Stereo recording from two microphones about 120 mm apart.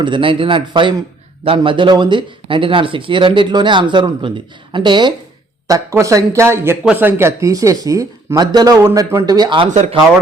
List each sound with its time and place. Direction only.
0.0 s speech: 45° right (ahead or behind)
5.6 s speech: 25° right (ahead or behind)
9.2 s speech: 35° right (ahead or behind)
9.6 s speech: 80° right